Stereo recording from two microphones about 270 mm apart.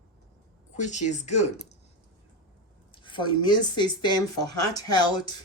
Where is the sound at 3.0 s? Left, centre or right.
Centre.